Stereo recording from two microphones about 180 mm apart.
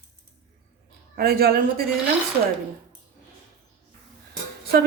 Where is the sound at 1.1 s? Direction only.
55° right (ahead or behind).